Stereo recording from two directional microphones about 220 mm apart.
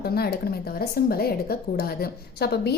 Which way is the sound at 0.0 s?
45° left (ahead or behind).